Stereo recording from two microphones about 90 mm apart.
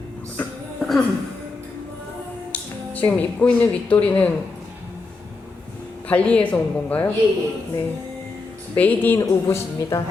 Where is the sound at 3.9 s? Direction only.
15° left (ahead or behind).